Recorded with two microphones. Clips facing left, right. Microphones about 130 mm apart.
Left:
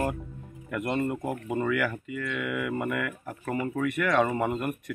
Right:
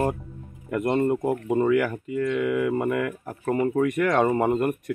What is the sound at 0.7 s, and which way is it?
Speech, 35° right (ahead or behind).